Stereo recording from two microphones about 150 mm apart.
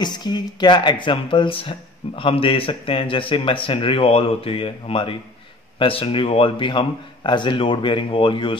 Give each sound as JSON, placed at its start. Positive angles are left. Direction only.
{"t": 0.0, "sound": "speech", "side_deg": 30}